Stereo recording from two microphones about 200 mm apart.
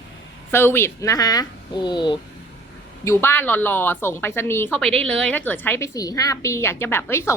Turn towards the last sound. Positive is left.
turn(degrees=10)  # may be behind; listen again after turning